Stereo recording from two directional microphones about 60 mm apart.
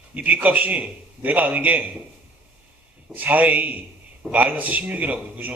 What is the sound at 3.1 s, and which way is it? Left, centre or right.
A man's voice, right.